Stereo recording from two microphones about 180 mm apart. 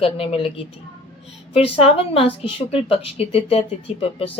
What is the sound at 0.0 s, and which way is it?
Speech, 30° left (ahead or behind).